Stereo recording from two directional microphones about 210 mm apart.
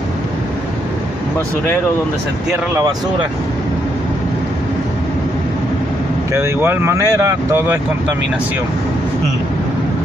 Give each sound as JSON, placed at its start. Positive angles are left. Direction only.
{"t": 2.7, "sound": "speech", "side_deg": -15}
{"t": 6.3, "sound": "speech", "side_deg": -10}